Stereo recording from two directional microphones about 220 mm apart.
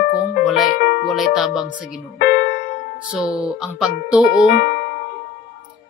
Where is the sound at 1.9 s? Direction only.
45° left (ahead or behind).